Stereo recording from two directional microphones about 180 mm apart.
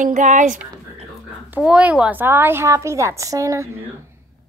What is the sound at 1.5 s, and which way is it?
A woman's voice, 5° right (ahead or behind).